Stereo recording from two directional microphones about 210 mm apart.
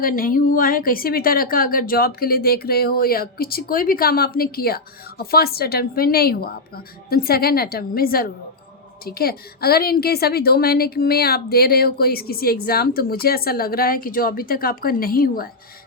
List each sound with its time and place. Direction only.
0.0 s a woman's voice: 45° left (ahead or behind)